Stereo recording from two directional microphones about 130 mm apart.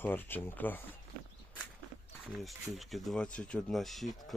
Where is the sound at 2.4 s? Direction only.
Centre (ahead or behind).